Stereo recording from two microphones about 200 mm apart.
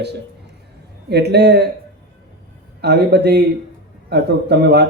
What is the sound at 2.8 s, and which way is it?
A man's voice, 55° right (ahead or behind).